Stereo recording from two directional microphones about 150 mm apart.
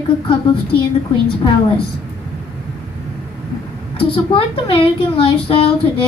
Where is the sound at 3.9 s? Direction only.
35° left (ahead or behind).